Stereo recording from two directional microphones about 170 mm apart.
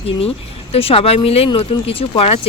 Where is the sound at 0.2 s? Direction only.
35° left (ahead or behind).